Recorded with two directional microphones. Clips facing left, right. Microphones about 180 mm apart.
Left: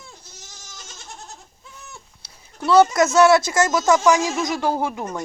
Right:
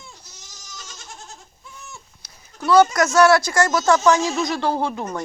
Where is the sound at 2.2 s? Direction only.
25° left (ahead or behind).